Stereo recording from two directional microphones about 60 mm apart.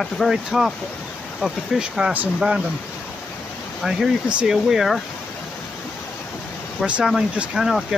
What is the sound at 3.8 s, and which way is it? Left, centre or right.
Speech, centre.